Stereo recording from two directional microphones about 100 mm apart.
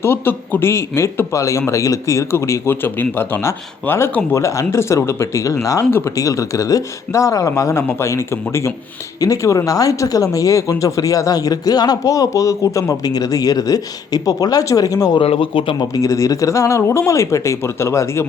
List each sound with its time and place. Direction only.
0.0 s speech: 25° left (ahead or behind); by 15.2 s 40° left (ahead or behind)
15.2 s speech: 65° left (ahead or behind)
16.0 s speech: 35° left (ahead or behind)